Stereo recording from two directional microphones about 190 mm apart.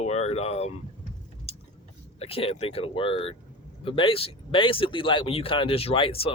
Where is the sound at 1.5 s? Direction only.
30° left (ahead or behind).